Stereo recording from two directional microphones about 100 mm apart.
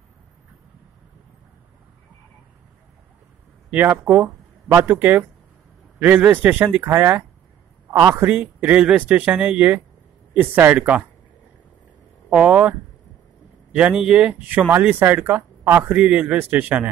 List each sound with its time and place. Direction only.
3.7 s speech: 15° right (ahead or behind)
8.4 s speech: 15° right (ahead or behind)
12.3 s speech: 15° right (ahead or behind)
13.7 s speech: 10° right (ahead or behind)